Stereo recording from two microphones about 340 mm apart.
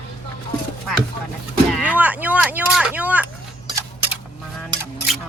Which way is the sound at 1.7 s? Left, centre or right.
Centre.